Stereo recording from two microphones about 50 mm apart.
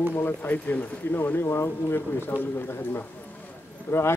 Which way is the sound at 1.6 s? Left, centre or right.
Left.